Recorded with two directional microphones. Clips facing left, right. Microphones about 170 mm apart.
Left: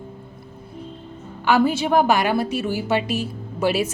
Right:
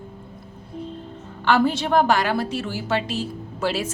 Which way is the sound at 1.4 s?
10° left (ahead or behind).